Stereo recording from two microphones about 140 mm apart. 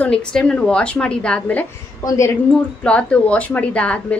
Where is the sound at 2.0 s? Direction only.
25° left (ahead or behind).